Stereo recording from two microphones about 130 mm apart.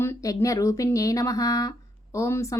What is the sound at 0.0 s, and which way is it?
Speech, 20° left (ahead or behind).